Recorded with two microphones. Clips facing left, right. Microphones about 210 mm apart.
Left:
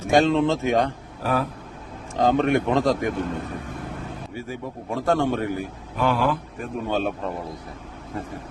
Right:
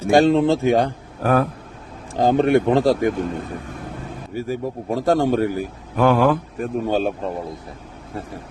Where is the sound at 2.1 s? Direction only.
35° right (ahead or behind).